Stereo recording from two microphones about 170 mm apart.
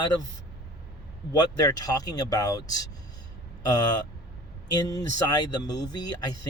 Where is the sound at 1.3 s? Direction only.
20° left (ahead or behind).